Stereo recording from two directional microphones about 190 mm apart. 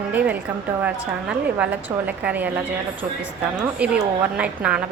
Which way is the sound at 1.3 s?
5° right (ahead or behind).